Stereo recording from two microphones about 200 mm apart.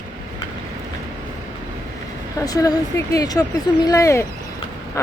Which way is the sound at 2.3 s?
15° left (ahead or behind).